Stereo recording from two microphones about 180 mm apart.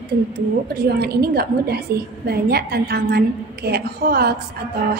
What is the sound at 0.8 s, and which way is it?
A woman's voice, 60° right (ahead or behind).